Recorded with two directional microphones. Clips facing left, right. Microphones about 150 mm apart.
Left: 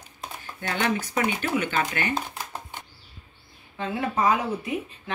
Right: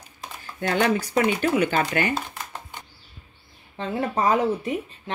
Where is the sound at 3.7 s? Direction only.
40° right (ahead or behind).